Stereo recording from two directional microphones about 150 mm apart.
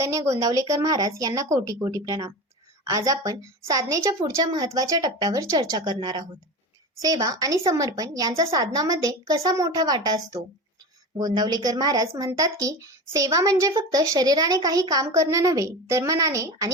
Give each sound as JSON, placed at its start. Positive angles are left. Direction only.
{"t": 0.0, "sound": "speech", "side_deg": -20}